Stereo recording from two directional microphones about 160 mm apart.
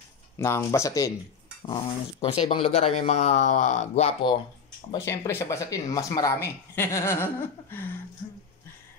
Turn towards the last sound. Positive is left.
turn(degrees=15)  # may be behind; listen again after turning